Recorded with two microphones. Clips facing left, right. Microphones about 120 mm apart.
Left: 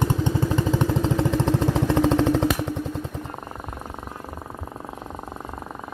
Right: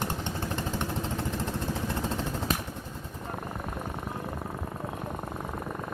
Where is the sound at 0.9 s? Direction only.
90° left.